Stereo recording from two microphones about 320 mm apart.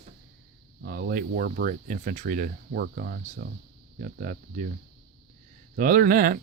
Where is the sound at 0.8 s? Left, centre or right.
Right.